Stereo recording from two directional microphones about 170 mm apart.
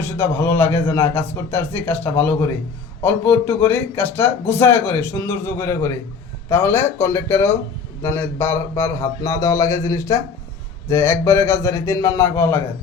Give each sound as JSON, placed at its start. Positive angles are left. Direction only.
{"t": 0.0, "sound": "speech", "side_deg": 15}